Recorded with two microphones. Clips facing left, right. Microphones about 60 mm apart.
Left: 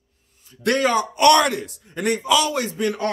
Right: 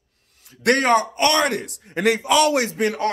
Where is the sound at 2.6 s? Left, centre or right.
Right.